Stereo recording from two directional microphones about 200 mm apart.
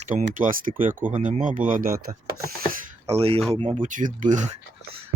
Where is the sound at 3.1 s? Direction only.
30° right (ahead or behind).